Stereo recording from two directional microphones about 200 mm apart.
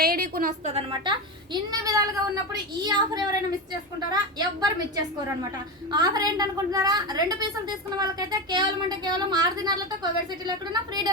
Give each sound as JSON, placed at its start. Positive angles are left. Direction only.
{"t": 0.0, "sound": "a sound", "side_deg": -50}
{"t": 0.7, "sound": "speech", "side_deg": -25}
{"t": 5.9, "sound": "speech", "side_deg": -20}